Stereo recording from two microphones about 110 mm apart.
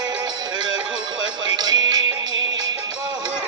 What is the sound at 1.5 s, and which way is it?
Music, 40° right (ahead or behind).